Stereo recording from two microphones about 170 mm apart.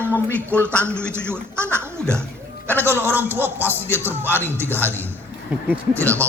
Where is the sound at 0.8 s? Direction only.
15° right (ahead or behind).